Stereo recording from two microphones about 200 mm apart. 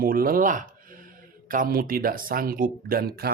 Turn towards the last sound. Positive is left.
turn(degrees=-50)  # may be behind; listen again after turning